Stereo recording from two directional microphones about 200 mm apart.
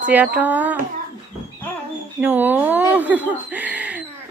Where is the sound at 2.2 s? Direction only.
10° right (ahead or behind).